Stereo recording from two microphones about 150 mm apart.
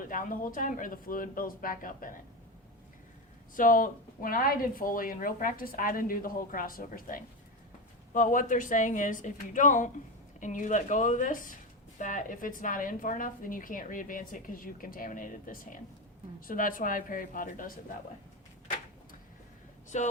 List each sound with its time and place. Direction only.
0.1 s a woman's voice: 65° left (ahead or behind)
3.5 s a woman's voice: 65° left (ahead or behind)
19.9 s speech: 50° left (ahead or behind)